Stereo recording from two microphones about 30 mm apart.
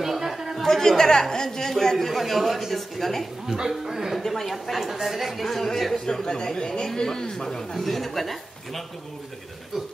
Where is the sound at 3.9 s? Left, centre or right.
Centre.